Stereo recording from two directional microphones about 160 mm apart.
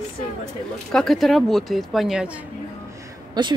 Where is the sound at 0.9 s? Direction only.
Centre (ahead or behind).